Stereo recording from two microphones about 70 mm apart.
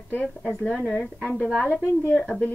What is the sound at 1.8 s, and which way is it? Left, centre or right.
Speech, left.